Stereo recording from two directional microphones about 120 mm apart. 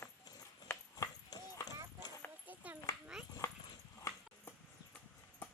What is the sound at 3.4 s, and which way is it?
Dog, 25° left (ahead or behind).